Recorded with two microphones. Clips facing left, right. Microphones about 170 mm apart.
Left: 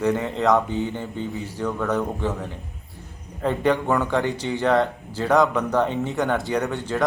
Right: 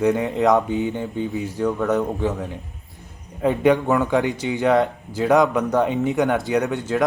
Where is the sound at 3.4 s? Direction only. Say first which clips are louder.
Right 4 dB; 10° right (ahead or behind).